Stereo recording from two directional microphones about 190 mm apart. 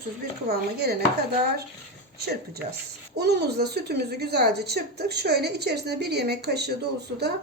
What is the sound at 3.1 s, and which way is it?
A woman's voice, 60° right (ahead or behind).